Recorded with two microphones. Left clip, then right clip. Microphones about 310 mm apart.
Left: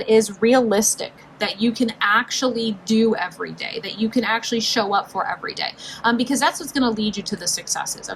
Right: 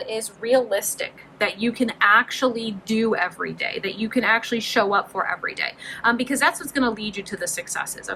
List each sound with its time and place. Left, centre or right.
0.7 s a woman's voice: centre
1.4 s speech: centre